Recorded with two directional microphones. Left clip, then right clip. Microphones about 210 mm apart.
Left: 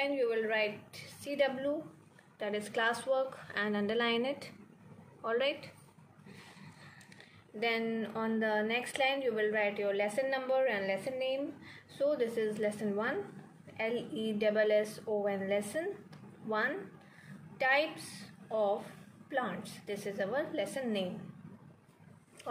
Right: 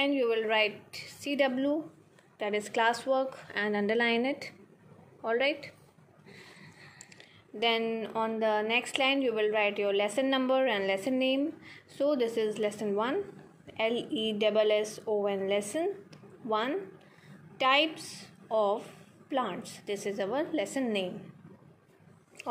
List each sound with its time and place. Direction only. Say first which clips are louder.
0.0 s a woman's voice: right 4 dB; 40° right (ahead or behind); by 5.7 s 20° right (ahead or behind)
7.5 s a woman's voice: right 5 dB; 30° right (ahead or behind)